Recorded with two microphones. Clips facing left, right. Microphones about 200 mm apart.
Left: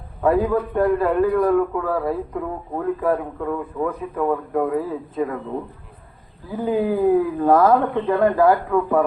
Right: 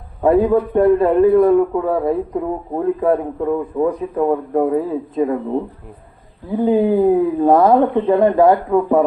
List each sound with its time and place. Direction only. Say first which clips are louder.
0.2 s a man's voice: right 5 dB; 25° right (ahead or behind)
6.7 s a man's voice: right 4 dB; 25° right (ahead or behind)